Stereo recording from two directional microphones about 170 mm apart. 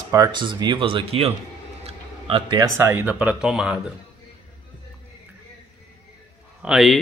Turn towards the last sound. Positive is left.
turn(degrees=0)  # may be behind; listen again after turning